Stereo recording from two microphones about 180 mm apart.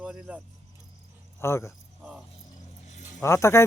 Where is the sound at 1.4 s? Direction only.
15° left (ahead or behind).